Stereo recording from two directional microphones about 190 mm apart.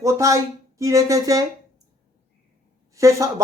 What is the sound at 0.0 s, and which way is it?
Speech, 15° right (ahead or behind).